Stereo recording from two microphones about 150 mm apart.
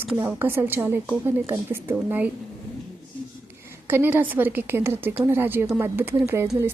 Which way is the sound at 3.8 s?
15° right (ahead or behind).